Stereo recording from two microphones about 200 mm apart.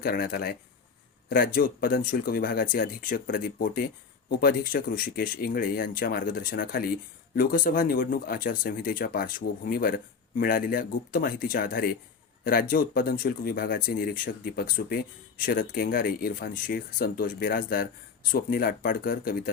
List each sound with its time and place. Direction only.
0.0 s speech: 50° left (ahead or behind)